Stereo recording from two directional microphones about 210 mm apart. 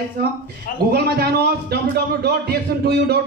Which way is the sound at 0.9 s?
50° right (ahead or behind).